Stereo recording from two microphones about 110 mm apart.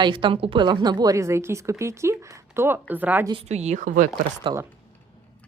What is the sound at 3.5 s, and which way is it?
Speech, 90° right.